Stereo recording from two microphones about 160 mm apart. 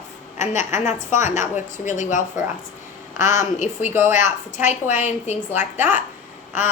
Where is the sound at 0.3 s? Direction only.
50° left (ahead or behind).